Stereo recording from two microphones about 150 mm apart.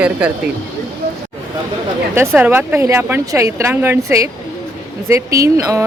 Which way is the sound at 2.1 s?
15° right (ahead or behind).